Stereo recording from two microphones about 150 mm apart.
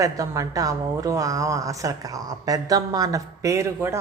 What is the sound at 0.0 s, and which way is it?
Speech, 25° right (ahead or behind).